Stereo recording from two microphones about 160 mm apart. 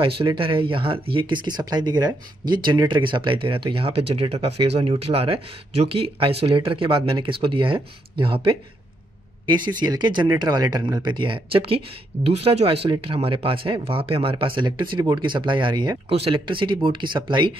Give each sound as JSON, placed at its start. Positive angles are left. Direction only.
{"t": 0.0, "sound": "speech", "side_deg": -30}